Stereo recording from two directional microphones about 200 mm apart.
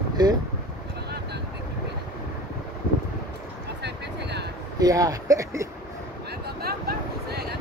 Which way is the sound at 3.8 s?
55° right (ahead or behind).